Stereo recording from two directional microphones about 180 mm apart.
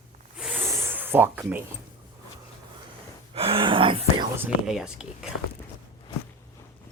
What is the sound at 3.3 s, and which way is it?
Whispering, 30° right (ahead or behind).